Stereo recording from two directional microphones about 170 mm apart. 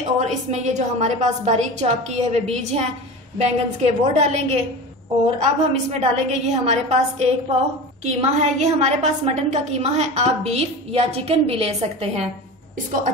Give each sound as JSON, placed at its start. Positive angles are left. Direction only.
{"t": 0.2, "sound": "a woman's voice", "side_deg": -45}